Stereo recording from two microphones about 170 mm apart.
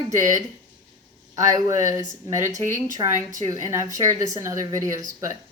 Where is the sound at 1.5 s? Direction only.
20° right (ahead or behind).